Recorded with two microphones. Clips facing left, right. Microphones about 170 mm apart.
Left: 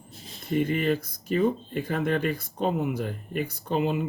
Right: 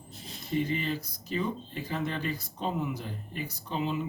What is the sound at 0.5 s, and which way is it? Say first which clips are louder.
Speech: left 6 dB; 55° left (ahead or behind).